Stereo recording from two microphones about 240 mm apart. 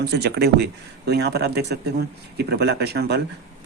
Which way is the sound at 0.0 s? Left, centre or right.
Right.